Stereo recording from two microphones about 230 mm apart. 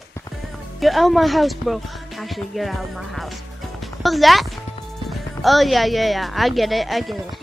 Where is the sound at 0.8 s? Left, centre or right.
Centre.